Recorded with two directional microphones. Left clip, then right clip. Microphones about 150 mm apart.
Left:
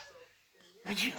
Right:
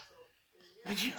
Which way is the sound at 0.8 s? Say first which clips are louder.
Left 2 dB; 30° left (ahead or behind).